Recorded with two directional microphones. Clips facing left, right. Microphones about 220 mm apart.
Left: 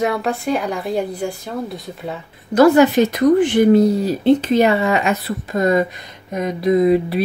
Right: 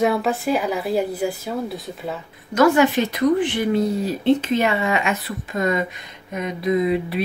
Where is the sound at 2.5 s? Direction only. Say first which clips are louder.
Left 5 dB; 40° left (ahead or behind).